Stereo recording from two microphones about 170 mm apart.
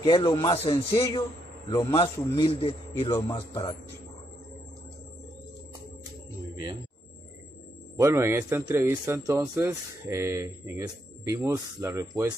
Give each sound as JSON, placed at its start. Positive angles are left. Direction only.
{"t": 0.0, "sound": "a man's voice", "side_deg": 25}
{"t": 8.0, "sound": "a man's voice", "side_deg": -15}